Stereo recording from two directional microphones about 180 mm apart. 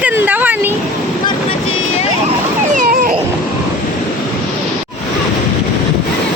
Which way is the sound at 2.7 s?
50° right (ahead or behind).